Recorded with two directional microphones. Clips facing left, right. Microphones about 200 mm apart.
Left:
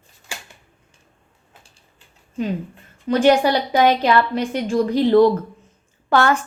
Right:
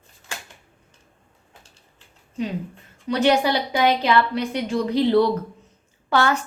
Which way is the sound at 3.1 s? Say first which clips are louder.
Left 4 dB; 45° left (ahead or behind).